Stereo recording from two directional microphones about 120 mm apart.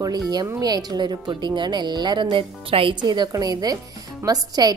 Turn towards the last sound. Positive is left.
turn(degrees=-30)  # may be behind; listen again after turning